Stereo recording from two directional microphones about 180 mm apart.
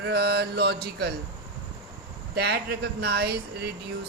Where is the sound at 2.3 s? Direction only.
60° right (ahead or behind).